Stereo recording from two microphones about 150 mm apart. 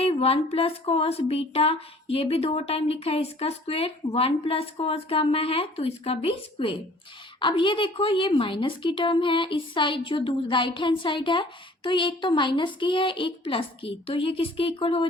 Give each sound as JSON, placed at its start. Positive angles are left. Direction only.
{"t": 0.0, "sound": "a woman's voice", "side_deg": 40}